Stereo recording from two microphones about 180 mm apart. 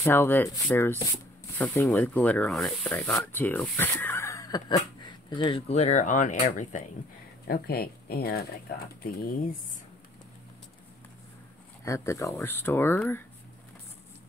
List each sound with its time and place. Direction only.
0.0 s speech: 10° left (ahead or behind); by 6.8 s 45° left (ahead or behind)
7.4 s speech: 60° left (ahead or behind)
11.8 s speech: 15° left (ahead or behind)